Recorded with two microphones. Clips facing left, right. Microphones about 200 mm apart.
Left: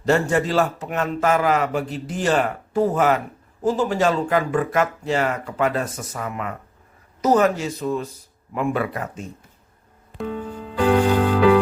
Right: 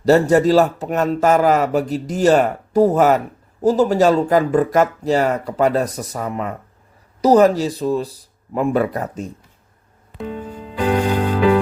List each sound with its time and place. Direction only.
0.0 s a man's voice: 40° right (ahead or behind)
10.2 s music: 15° right (ahead or behind)